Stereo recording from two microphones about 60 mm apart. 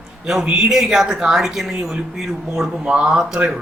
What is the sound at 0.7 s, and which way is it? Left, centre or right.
Speech, centre.